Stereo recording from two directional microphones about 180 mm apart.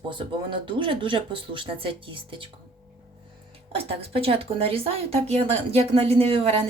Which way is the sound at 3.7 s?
30° right (ahead or behind).